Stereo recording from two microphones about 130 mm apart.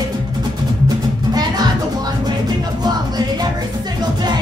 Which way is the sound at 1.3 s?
30° right (ahead or behind).